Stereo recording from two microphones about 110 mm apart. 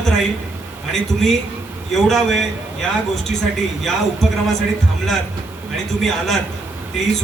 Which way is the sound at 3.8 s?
Centre (ahead or behind).